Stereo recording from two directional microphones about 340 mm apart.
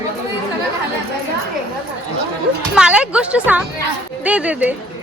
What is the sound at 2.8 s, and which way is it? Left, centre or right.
A woman's voice, centre.